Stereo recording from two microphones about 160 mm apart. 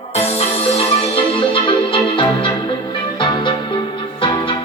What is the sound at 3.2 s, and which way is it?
Music, 30° left (ahead or behind).